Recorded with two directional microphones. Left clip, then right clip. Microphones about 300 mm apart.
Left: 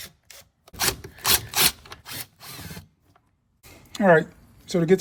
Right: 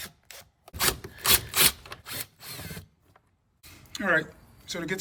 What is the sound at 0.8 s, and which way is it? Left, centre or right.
Rub, centre.